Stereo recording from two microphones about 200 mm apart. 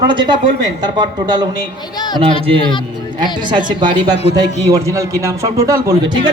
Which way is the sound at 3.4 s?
25° right (ahead or behind).